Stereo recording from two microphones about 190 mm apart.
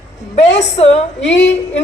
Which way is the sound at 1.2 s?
65° left (ahead or behind).